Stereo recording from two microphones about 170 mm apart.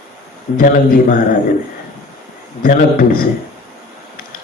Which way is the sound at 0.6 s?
55° left (ahead or behind).